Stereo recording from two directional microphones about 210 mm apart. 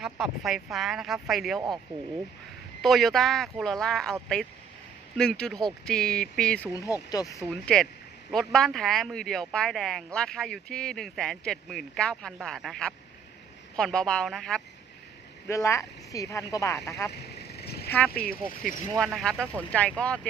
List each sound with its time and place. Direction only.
0.0 s speech: centre (ahead or behind)
1.6 s speech: 20° right (ahead or behind)
2.8 s speech: centre (ahead or behind)
6.7 s speech: 15° left (ahead or behind)
7.5 s speech: 5° left (ahead or behind)
15.4 s speech: 15° left (ahead or behind)
17.1 s vehicle: 50° left (ahead or behind)
18.1 s speech: 45° left (ahead or behind)
18.9 s speech: centre (ahead or behind)